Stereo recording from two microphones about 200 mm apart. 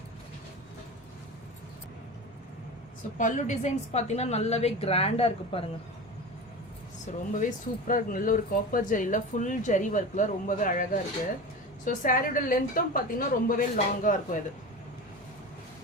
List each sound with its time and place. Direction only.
3.2 s speech: 40° left (ahead or behind)
7.3 s a woman's voice: 40° left (ahead or behind)